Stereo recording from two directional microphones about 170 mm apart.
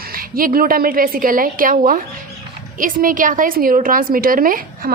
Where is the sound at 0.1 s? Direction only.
55° right (ahead or behind).